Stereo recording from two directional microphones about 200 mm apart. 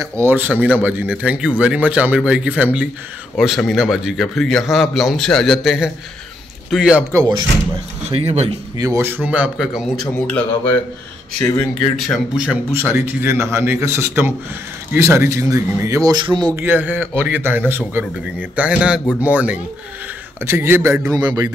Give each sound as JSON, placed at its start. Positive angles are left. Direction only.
{"t": 0.2, "sound": "a man's voice", "side_deg": -10}
{"t": 0.5, "sound": "a man's voice", "side_deg": 5}
{"t": 0.7, "sound": "a man's voice", "side_deg": -10}
{"t": 8.1, "sound": "speech", "side_deg": -30}
{"t": 8.8, "sound": "a man's voice", "side_deg": -10}
{"t": 10.2, "sound": "speech", "side_deg": 5}
{"t": 12.1, "sound": "a man's voice", "side_deg": -5}
{"t": 16.6, "sound": "a man's voice", "side_deg": -10}